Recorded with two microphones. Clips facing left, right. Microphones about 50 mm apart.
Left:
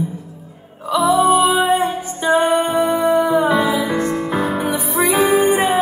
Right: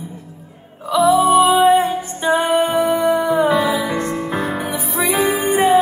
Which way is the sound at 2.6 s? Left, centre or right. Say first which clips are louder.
Even; left.